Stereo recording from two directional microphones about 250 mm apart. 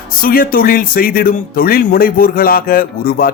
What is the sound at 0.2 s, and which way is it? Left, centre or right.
A man's voice, left.